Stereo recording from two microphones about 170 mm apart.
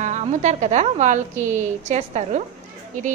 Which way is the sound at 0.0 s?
45° right (ahead or behind).